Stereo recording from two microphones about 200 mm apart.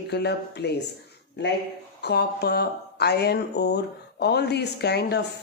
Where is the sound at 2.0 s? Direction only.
55° left (ahead or behind).